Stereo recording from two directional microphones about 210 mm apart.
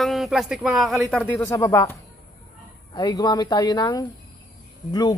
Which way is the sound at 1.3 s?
15° left (ahead or behind).